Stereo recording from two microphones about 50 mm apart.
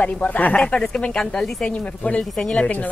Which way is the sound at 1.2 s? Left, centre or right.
Centre.